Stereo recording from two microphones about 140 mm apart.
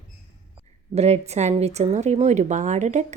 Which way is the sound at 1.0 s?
50° right (ahead or behind).